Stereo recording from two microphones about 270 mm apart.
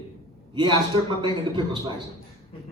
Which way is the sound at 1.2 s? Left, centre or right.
Centre.